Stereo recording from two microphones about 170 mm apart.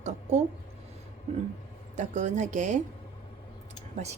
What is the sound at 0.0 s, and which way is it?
Speech, 40° right (ahead or behind).